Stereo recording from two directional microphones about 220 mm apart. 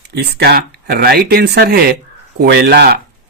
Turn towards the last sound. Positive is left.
turn(degrees=-45)  # may be behind; listen again after turning